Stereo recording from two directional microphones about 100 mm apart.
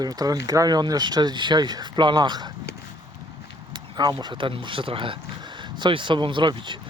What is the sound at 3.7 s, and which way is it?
Speech, 50° right (ahead or behind).